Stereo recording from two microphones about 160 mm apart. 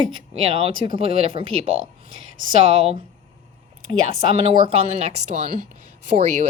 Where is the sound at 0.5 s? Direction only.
40° right (ahead or behind).